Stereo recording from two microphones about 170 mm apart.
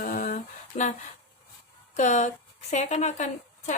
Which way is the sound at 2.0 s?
45° left (ahead or behind).